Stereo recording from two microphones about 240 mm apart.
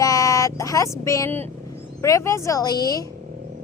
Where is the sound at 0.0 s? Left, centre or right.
Centre.